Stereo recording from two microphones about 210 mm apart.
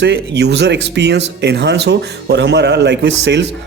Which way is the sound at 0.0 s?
55° right (ahead or behind).